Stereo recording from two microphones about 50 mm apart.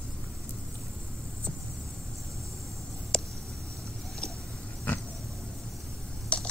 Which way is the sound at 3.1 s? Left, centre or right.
Centre.